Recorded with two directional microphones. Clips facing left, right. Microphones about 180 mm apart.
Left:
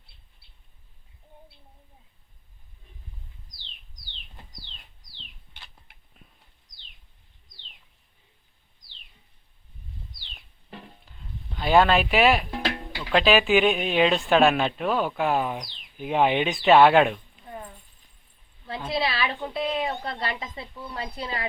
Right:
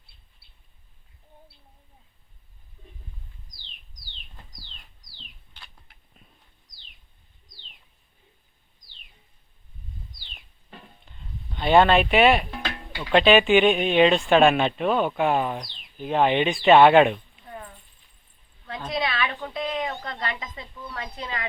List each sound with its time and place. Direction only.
10.7 s music: 5° left (ahead or behind)
12.5 s music: 30° left (ahead or behind)
13.1 s speech: centre (ahead or behind)
17.4 s a sound: 10° left (ahead or behind)
18.9 s a woman's voice: 30° left (ahead or behind)